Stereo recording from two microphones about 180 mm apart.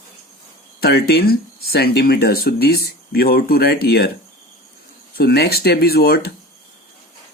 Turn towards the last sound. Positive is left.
turn(degrees=60)  # may be behind; listen again after turning